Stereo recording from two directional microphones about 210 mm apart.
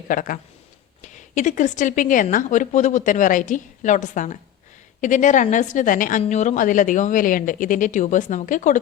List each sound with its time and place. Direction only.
0.1 s a woman's voice: 40° left (ahead or behind)